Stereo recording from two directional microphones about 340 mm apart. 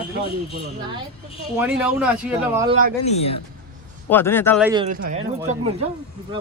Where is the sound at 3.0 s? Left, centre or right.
Centre.